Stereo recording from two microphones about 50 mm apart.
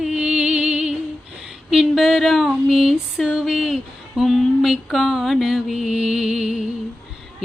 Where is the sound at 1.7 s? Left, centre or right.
Centre.